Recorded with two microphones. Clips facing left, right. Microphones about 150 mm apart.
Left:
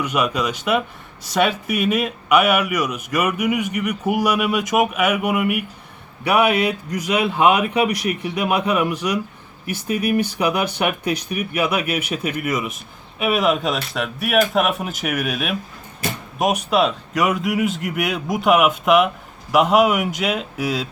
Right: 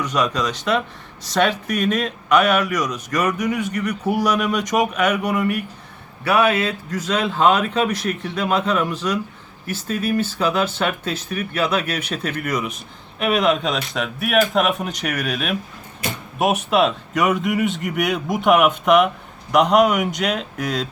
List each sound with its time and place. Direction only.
0.0 s speech: 10° left (ahead or behind)